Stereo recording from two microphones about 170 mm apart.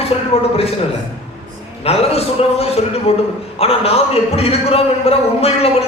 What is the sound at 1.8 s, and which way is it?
A man's voice, 35° left (ahead or behind).